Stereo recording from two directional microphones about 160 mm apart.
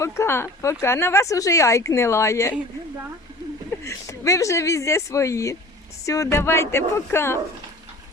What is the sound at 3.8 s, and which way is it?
Speech, 20° left (ahead or behind).